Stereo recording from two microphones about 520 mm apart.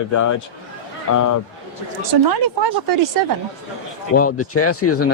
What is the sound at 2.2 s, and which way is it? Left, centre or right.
Speech, right.